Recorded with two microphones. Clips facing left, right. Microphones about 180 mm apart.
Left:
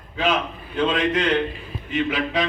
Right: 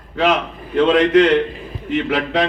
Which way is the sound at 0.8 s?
80° right.